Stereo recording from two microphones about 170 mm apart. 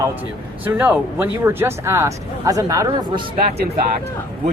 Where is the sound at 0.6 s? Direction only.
10° right (ahead or behind); by 3.2 s 25° right (ahead or behind).